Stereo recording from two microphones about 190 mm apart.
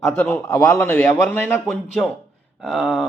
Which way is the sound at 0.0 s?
15° left (ahead or behind).